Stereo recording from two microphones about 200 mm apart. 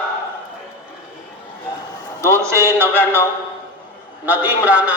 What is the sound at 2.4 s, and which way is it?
Speech, 15° right (ahead or behind).